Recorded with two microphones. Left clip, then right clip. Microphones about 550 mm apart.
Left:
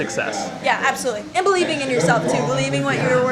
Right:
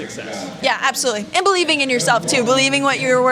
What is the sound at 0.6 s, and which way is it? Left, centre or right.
A woman's voice, right.